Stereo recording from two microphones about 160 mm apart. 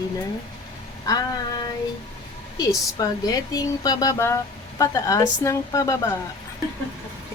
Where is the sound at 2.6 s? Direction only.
25° left (ahead or behind).